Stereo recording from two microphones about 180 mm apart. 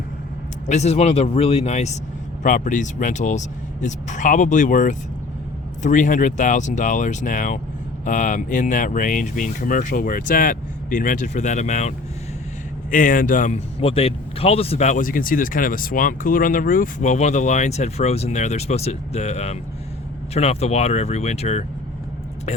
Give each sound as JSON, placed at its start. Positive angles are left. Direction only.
{"t": 0.7, "sound": "a man's voice", "side_deg": 35}